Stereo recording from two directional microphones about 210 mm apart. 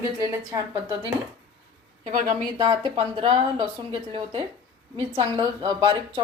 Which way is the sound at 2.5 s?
20° right (ahead or behind).